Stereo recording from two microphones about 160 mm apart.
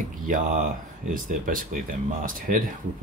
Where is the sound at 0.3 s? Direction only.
50° right (ahead or behind).